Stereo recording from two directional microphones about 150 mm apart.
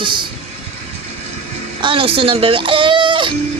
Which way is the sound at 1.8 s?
35° right (ahead or behind).